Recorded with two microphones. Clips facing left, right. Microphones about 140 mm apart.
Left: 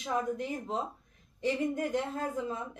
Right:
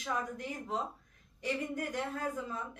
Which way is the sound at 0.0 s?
20° left (ahead or behind).